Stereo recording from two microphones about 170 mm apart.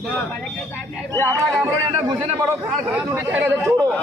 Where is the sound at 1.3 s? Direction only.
15° right (ahead or behind).